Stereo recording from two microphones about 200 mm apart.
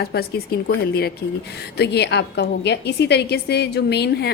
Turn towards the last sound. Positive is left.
turn(degrees=55)  # may be behind; listen again after turning